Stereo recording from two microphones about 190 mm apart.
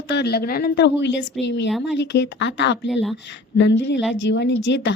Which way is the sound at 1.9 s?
65° left (ahead or behind).